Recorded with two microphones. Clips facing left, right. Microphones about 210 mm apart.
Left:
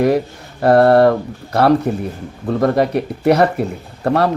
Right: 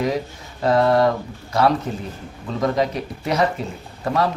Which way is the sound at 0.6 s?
65° left (ahead or behind).